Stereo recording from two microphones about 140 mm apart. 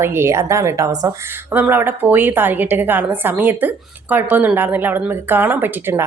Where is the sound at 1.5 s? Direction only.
15° right (ahead or behind).